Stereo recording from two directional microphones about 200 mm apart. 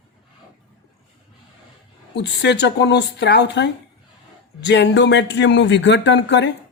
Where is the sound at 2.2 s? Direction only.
60° left (ahead or behind).